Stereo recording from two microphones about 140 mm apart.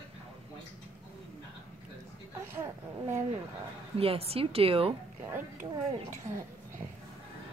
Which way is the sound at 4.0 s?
45° right (ahead or behind).